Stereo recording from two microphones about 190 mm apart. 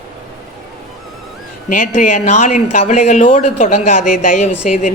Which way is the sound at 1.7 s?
40° left (ahead or behind).